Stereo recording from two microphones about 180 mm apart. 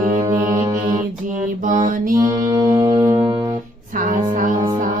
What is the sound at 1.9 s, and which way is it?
Music, 50° right (ahead or behind).